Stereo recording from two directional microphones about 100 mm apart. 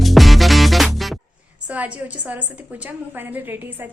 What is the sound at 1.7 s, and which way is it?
A woman's voice, 15° right (ahead or behind).